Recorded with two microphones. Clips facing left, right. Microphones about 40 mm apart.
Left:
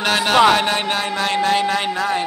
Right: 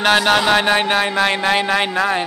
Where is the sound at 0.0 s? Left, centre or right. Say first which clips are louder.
Right 4 dB; right.